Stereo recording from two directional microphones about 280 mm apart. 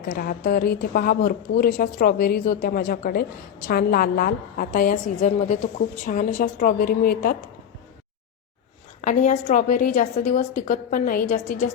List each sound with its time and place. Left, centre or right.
0.0 s a woman's voice: left
9.0 s a woman's voice: left